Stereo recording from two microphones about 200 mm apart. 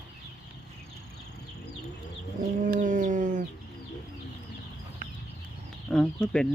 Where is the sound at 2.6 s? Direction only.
40° right (ahead or behind).